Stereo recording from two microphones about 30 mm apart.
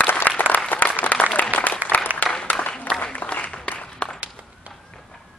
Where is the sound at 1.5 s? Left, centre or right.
Left.